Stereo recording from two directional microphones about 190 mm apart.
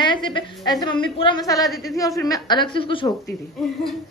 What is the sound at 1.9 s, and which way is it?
A man's voice, 20° left (ahead or behind).